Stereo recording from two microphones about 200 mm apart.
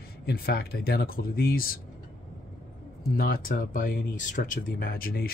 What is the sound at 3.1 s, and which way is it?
Speech, 45° left (ahead or behind).